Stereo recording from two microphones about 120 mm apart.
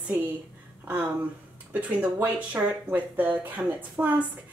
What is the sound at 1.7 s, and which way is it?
A woman's voice, 10° right (ahead or behind).